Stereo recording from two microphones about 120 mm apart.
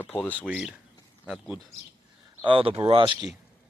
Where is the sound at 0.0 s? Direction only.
15° left (ahead or behind).